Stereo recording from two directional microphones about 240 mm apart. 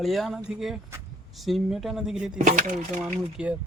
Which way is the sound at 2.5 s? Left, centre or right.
Right.